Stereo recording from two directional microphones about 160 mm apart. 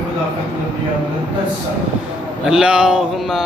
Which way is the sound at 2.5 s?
5° right (ahead or behind).